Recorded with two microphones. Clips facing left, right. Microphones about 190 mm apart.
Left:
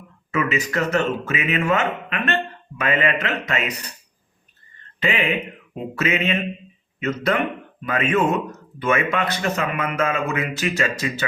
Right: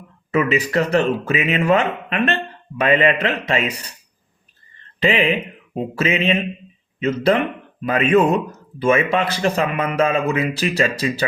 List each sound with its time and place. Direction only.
0.3 s speech: 35° right (ahead or behind)
4.9 s mantra: 30° right (ahead or behind)
7.0 s speech: 30° right (ahead or behind)